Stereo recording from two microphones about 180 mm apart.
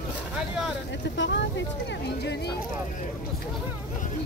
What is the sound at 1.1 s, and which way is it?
Speech, 80° left.